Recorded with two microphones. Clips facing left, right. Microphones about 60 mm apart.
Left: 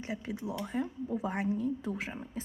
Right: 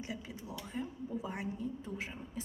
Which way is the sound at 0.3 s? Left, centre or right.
Left.